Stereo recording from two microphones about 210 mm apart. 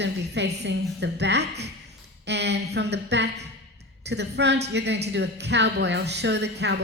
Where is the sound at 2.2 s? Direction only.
55° right (ahead or behind).